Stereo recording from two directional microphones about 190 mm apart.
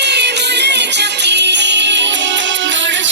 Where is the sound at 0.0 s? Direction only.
65° right (ahead or behind).